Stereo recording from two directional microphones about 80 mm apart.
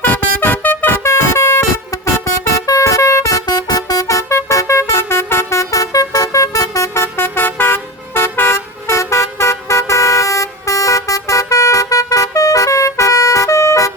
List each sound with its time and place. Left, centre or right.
0.0 s vehicle horn: left
3.4 s music: left